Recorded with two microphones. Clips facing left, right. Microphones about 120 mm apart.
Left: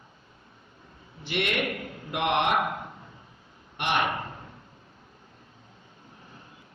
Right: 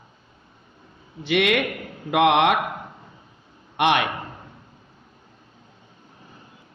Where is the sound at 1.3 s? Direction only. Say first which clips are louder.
Right 8 dB; 90° right.